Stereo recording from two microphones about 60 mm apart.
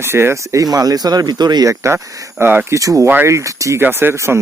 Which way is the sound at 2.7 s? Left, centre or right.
Right.